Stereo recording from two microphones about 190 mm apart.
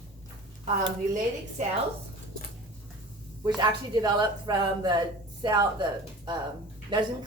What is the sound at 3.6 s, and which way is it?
A woman's voice, 20° right (ahead or behind).